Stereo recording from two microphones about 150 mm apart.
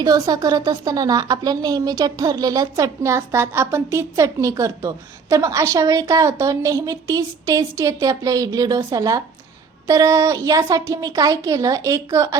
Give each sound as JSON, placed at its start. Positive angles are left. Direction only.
{"t": 0.0, "sound": "a woman's voice", "side_deg": -25}